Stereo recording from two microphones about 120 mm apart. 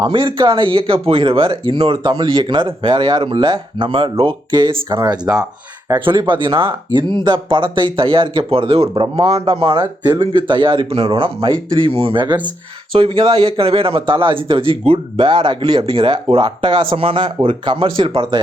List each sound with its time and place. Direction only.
0.1 s a man's voice: 45° right (ahead or behind)
5.2 s speech: 5° right (ahead or behind)
6.1 s a man's voice: 45° right (ahead or behind)
12.9 s a man's voice: 50° right (ahead or behind)